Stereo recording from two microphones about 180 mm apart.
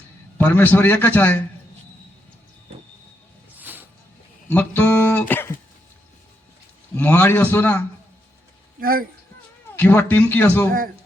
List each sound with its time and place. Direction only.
0.3 s a man's voice: 10° left (ahead or behind)
3.6 s music: 10° right (ahead or behind)
4.5 s speech: 10° left (ahead or behind)
5.3 s a sound: 10° left (ahead or behind)
6.9 s a man's voice: 10° left (ahead or behind)
8.8 s speech: 55° right (ahead or behind)
9.7 s a man's voice: 10° left (ahead or behind)